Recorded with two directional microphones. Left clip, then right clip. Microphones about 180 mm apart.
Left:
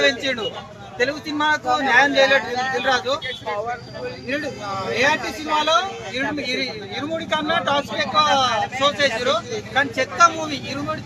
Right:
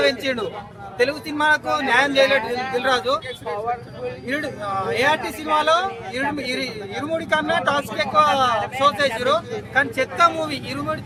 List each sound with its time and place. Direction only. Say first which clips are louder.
0.0 s speech: left 1 dB; 30° right (ahead or behind)
4.9 s speech: left 1 dB; 30° right (ahead or behind)